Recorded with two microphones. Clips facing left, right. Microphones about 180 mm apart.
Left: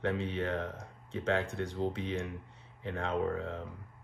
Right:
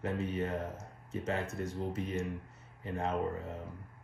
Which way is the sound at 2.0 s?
90° left.